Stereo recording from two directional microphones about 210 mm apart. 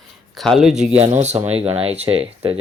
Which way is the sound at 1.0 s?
30° right (ahead or behind).